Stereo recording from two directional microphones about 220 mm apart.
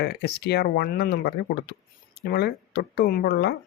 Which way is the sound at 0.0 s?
50° left (ahead or behind).